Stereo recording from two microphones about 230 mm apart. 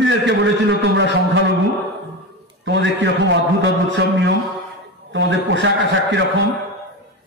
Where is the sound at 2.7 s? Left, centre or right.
Right.